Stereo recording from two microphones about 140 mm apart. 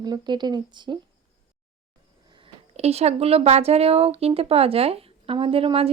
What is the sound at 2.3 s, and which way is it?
Speech, 45° right (ahead or behind).